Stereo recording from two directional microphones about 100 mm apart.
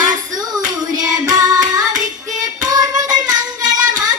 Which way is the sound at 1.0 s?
40° right (ahead or behind).